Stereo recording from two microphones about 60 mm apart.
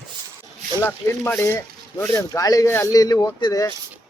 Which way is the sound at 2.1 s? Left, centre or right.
Left.